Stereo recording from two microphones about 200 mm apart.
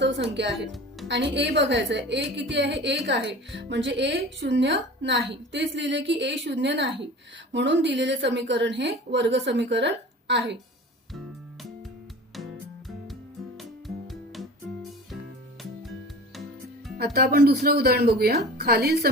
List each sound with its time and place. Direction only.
0.0 s a woman's voice: 60° right (ahead or behind)
13.6 s music: centre (ahead or behind)
17.0 s speech: 50° right (ahead or behind)